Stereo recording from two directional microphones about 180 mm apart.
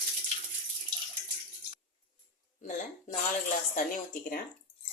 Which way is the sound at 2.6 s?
40° left (ahead or behind).